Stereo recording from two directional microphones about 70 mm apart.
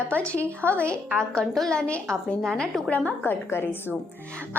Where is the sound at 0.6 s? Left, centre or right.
Right.